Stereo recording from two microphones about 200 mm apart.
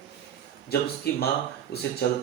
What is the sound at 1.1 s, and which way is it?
Speech, 50° left (ahead or behind).